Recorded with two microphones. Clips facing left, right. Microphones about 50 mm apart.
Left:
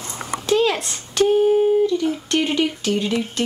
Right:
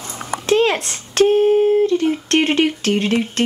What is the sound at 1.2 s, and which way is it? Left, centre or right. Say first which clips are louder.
Speech: right 2 dB; right.